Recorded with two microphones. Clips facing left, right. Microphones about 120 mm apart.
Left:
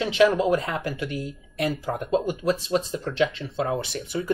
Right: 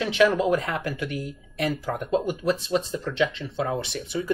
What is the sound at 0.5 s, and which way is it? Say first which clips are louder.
Speech: even; 30° left (ahead or behind).